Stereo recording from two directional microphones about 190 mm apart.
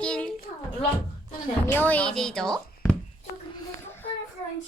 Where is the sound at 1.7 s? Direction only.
10° left (ahead or behind).